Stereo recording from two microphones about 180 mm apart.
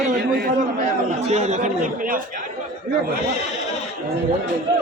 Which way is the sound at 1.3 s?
40° right (ahead or behind).